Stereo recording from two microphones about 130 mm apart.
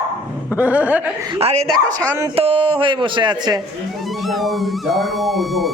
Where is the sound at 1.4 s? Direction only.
50° right (ahead or behind); by 3.6 s 35° right (ahead or behind).